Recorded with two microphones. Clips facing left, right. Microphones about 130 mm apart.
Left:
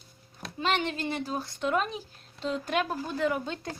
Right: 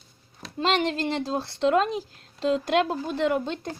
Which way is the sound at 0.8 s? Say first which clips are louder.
Right 5 dB; 90° right.